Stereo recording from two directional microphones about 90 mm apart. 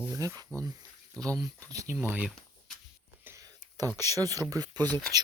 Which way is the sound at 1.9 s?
20° right (ahead or behind).